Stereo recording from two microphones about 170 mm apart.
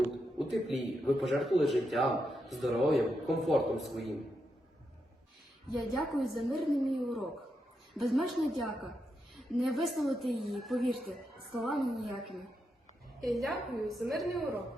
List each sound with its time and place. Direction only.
0.3 s a man's voice: centre (ahead or behind)
5.9 s a man's voice: centre (ahead or behind)